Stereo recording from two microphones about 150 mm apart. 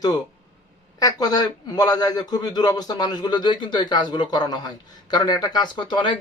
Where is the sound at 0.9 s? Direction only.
25° left (ahead or behind).